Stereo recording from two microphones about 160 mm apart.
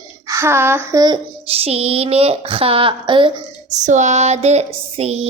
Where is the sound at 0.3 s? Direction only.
15° right (ahead or behind).